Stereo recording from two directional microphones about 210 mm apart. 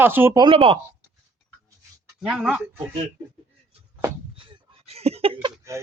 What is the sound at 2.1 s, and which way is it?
Speech, 5° right (ahead or behind).